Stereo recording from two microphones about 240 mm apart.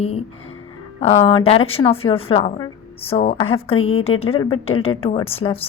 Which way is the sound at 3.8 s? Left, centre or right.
Left.